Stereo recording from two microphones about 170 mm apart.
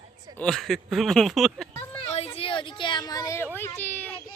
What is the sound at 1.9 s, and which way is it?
A child's voice, 35° left (ahead or behind).